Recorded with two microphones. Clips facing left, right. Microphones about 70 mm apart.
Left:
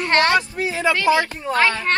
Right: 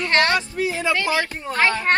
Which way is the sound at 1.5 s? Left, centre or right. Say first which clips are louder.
Even; right.